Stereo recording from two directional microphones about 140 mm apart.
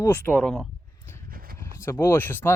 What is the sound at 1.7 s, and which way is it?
Speech, 20° left (ahead or behind).